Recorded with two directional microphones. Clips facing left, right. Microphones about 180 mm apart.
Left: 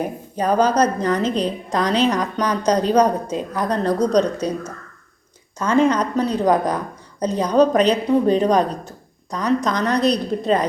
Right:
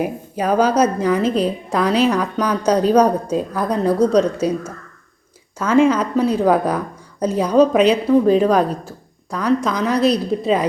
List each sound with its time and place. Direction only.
0.0 s a woman's voice: 10° right (ahead or behind)